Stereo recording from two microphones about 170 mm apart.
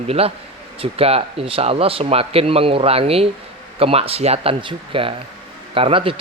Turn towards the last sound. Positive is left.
turn(degrees=-30)  # may be behind; listen again after turning